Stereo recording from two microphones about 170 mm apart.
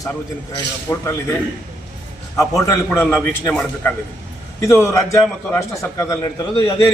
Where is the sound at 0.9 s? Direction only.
20° left (ahead or behind).